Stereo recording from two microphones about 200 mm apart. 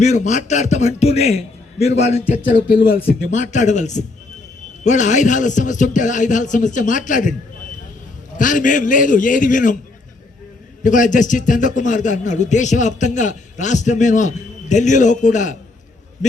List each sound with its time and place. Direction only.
0.0 s a man's voice: 35° left (ahead or behind)
2.6 s a man's voice: 45° left (ahead or behind)
8.4 s a man's voice: 40° left (ahead or behind)
10.8 s a man's voice: 40° left (ahead or behind)